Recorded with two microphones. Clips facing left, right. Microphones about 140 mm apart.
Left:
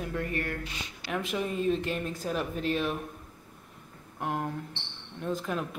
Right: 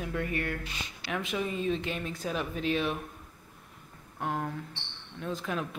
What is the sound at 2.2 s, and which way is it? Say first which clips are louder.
Speech: even; centre (ahead or behind).